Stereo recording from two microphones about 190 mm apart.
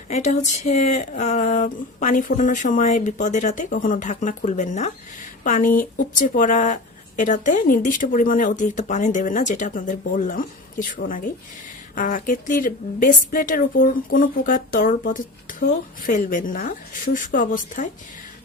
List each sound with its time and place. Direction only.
0.1 s speech: 40° left (ahead or behind)